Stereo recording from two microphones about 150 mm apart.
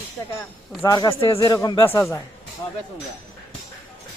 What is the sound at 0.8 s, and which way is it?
A man's voice, 25° left (ahead or behind).